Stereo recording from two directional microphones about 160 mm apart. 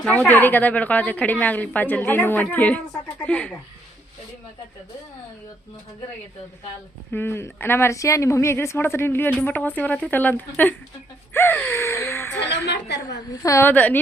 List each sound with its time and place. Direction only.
0.0 s a woman's voice: 10° left (ahead or behind)
7.1 s a woman's voice: 15° left (ahead or behind)
12.6 s a woman's voice: 90° left
13.3 s a woman's voice: 20° left (ahead or behind)